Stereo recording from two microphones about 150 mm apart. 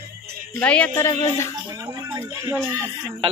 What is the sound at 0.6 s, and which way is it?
Speech, 10° left (ahead or behind).